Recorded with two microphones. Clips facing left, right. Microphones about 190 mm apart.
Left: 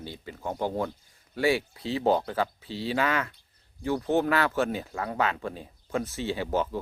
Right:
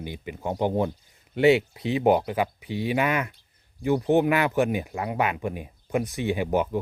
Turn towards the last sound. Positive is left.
turn(degrees=-15)  # may be behind; listen again after turning